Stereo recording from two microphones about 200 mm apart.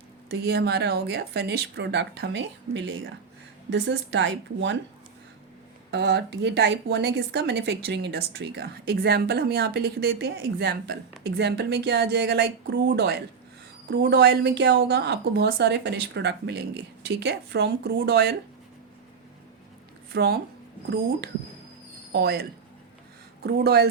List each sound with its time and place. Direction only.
0.3 s speech: 55° right (ahead or behind)
5.9 s speech: 55° right (ahead or behind)
20.1 s speech: 55° right (ahead or behind)
22.1 s speech: 55° right (ahead or behind)